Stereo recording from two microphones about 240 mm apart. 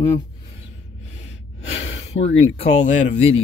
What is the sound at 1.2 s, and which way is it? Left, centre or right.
Snort, left.